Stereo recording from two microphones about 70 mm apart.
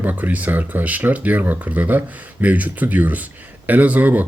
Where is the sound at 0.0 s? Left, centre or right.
Right.